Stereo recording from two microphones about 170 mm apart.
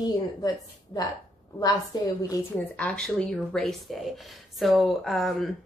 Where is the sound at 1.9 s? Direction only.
25° left (ahead or behind).